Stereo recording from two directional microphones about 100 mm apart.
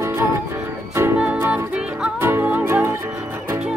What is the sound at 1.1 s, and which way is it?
Music, 15° right (ahead or behind).